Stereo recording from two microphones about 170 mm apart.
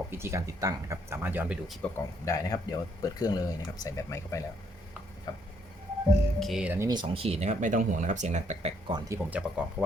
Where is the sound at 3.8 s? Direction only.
20° left (ahead or behind).